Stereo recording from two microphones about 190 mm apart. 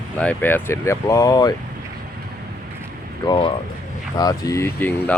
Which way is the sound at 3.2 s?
20° left (ahead or behind).